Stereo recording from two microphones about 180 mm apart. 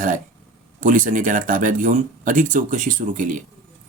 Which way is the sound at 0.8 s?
45° right (ahead or behind).